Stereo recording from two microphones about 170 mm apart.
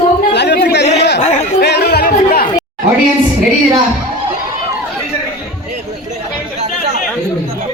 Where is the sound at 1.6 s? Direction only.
75° left (ahead or behind); by 2.5 s 60° left (ahead or behind).